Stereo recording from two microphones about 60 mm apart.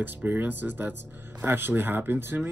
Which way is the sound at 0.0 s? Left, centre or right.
Right.